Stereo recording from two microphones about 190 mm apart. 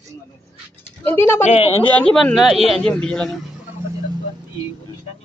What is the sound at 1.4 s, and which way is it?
Speech, 30° left (ahead or behind).